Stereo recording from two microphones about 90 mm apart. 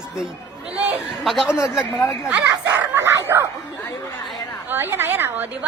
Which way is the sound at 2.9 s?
35° right (ahead or behind).